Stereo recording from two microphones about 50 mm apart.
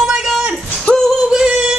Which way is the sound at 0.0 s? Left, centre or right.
Centre.